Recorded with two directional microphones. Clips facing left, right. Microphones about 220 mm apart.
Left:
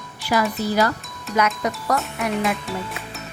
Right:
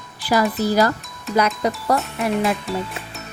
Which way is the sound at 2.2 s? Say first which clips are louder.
Right 3 dB; 30° right (ahead or behind).